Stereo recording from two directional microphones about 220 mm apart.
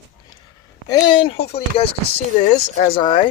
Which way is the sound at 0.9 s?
20° left (ahead or behind).